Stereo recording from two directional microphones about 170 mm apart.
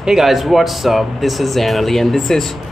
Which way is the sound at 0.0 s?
Centre (ahead or behind).